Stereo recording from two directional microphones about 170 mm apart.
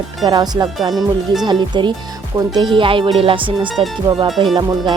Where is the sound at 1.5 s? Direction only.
25° right (ahead or behind).